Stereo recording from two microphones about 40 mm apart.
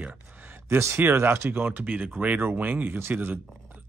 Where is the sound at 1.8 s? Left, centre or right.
Right.